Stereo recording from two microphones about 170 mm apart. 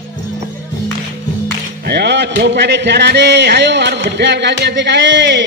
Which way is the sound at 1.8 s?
80° right.